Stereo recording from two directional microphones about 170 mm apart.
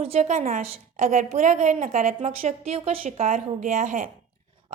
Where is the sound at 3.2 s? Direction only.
50° right (ahead or behind).